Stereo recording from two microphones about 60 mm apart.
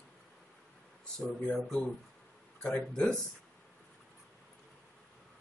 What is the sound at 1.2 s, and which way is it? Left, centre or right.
Speech, centre.